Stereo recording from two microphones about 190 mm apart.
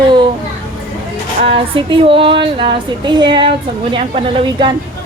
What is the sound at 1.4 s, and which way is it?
Speech, 30° right (ahead or behind).